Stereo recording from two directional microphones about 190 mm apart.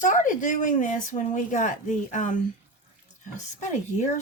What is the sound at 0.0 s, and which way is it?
A woman's voice, 45° left (ahead or behind).